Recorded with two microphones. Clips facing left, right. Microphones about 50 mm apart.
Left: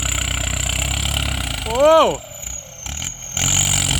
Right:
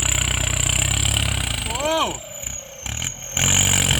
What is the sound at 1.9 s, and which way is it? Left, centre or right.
Speech, left.